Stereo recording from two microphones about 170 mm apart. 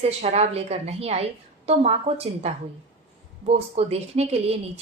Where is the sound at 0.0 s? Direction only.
40° right (ahead or behind).